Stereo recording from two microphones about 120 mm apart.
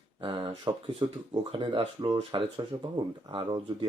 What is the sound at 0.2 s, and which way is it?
Speech, 45° right (ahead or behind).